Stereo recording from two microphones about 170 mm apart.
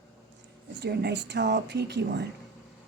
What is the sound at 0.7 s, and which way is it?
Speech, 85° right.